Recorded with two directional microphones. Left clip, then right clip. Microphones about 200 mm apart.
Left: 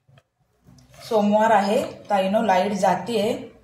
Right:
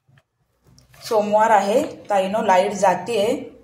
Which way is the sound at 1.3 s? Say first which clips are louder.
Right 3 dB; 30° right (ahead or behind).